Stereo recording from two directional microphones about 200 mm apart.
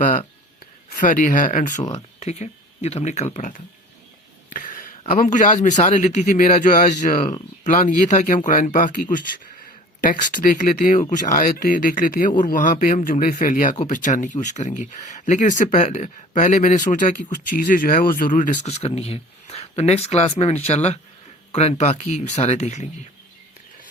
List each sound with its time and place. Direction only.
0.0 s speech: 40° left (ahead or behind)
4.5 s a sound: 40° left (ahead or behind)
5.2 s speech: 40° left (ahead or behind)